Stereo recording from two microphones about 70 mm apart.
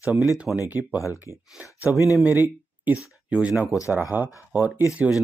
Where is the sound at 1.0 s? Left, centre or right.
Left.